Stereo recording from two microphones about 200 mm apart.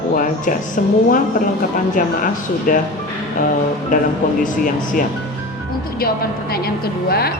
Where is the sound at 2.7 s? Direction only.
40° left (ahead or behind).